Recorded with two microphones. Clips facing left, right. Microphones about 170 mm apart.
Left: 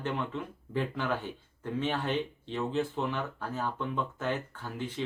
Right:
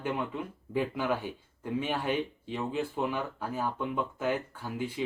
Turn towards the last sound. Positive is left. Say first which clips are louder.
# right 2 dB
turn(degrees=-10)  # may be behind; listen again after turning